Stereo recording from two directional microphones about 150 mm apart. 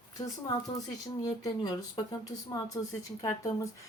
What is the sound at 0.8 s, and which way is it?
Speech, 20° left (ahead or behind).